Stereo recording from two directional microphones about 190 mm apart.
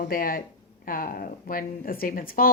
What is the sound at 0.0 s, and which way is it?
Speech, 45° left (ahead or behind).